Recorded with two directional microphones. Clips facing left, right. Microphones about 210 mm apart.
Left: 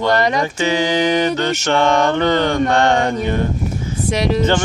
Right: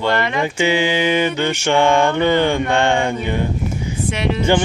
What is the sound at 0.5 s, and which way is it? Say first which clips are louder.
Speech: even; 15° right (ahead or behind).